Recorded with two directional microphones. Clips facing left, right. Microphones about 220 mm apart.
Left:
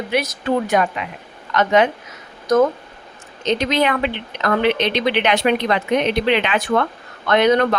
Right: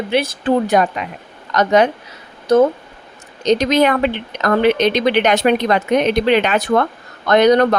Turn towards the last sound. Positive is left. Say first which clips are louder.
# right 4 dB
turn(degrees=-40)  # may be behind; listen again after turning